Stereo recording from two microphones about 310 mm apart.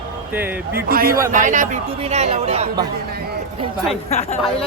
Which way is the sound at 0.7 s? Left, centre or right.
Right.